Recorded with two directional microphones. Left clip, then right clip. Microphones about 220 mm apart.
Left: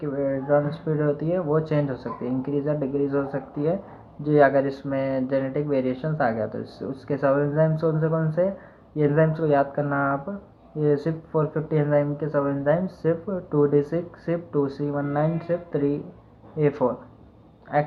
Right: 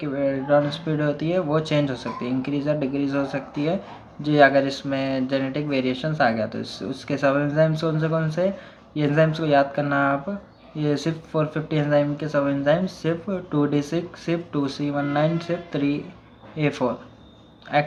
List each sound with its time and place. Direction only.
0.0 s speech: 20° right (ahead or behind)